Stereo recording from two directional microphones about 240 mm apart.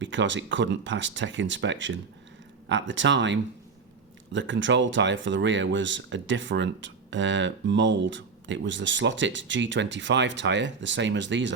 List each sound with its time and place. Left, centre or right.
0.0 s speech: right